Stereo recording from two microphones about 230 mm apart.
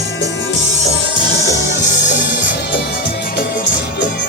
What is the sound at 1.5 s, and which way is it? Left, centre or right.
Music, left.